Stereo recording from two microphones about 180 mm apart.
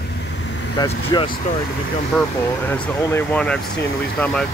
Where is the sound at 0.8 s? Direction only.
20° left (ahead or behind).